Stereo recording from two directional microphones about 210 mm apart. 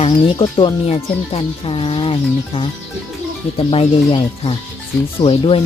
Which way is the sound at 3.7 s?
25° left (ahead or behind).